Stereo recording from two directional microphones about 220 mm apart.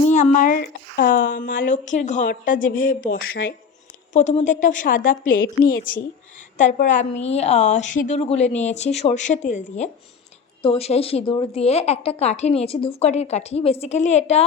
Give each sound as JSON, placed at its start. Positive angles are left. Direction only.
{"t": 0.1, "sound": "a woman's voice", "side_deg": 35}
{"t": 4.1, "sound": "a woman's voice", "side_deg": 35}